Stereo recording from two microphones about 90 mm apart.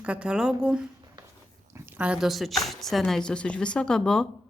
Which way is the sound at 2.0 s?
10° right (ahead or behind).